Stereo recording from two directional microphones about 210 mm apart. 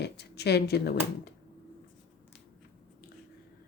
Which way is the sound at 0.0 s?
50° left (ahead or behind).